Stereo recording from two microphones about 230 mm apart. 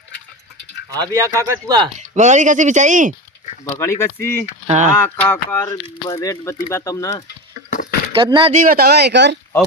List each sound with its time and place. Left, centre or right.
0.9 s speech: centre
2.0 s speech: right
3.6 s speech: centre
4.6 s speech: right
5.0 s speech: centre
7.7 s a sound: left
8.1 s speech: right
8.6 s speech: right